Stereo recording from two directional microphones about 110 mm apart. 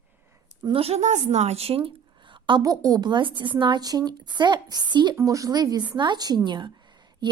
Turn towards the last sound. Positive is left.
turn(degrees=-40)  # may be behind; listen again after turning